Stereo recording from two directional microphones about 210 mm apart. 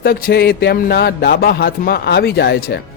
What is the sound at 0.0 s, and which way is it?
Music, 45° left (ahead or behind).